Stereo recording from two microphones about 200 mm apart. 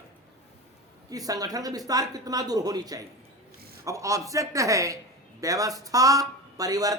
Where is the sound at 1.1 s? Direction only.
20° right (ahead or behind).